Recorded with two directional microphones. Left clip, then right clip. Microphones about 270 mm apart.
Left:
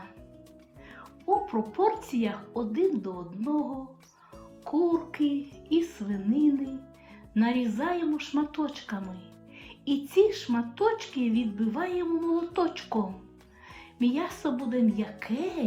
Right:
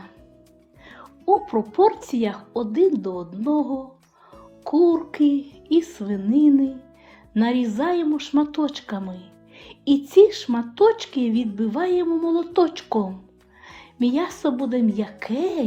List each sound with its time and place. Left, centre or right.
0.9 s music: right
1.7 s a woman's voice: right
4.6 s a woman's voice: right